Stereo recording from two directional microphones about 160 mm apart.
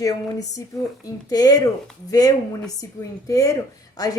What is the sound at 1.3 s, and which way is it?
Speech, 25° left (ahead or behind).